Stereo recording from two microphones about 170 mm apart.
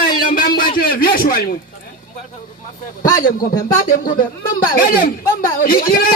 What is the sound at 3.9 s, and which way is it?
Speech, 55° left (ahead or behind).